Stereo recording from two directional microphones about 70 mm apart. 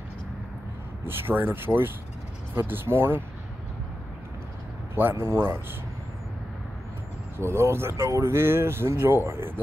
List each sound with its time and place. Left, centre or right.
1.0 s speech: right
4.9 s speech: right
7.3 s speech: right